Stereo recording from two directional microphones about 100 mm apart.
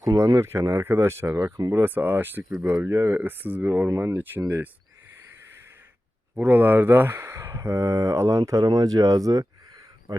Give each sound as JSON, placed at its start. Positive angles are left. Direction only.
{"t": 0.0, "sound": "speech", "side_deg": -35}
{"t": 1.8, "sound": "speech", "side_deg": -20}
{"t": 6.4, "sound": "speech", "side_deg": -20}